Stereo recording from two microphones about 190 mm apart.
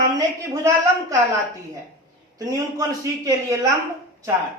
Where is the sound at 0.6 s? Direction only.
15° right (ahead or behind).